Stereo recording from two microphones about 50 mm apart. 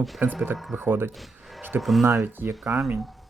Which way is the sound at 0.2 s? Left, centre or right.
Right.